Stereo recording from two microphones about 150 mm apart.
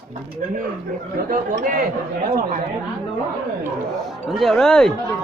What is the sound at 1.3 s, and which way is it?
Speech, 65° right (ahead or behind).